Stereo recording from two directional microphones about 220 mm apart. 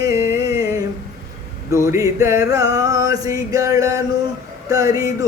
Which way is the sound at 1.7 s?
15° right (ahead or behind).